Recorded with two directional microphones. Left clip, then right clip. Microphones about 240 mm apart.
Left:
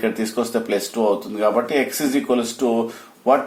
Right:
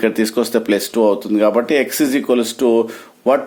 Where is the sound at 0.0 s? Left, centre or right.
Right.